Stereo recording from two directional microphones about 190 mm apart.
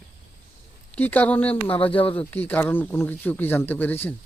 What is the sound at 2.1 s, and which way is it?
Speech, 10° left (ahead or behind).